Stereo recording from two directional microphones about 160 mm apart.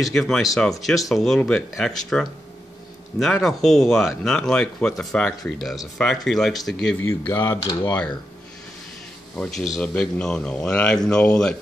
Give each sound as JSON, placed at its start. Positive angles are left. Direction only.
{"t": 0.0, "sound": "speech", "side_deg": 0}
{"t": 7.0, "sound": "speech", "side_deg": 15}
{"t": 9.3, "sound": "speech", "side_deg": 5}